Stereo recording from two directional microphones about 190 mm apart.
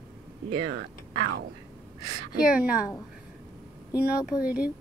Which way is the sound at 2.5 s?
5° right (ahead or behind).